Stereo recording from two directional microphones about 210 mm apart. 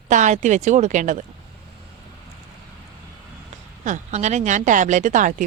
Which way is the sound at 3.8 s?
35° right (ahead or behind).